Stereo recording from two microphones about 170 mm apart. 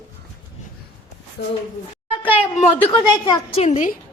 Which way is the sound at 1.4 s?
80° left.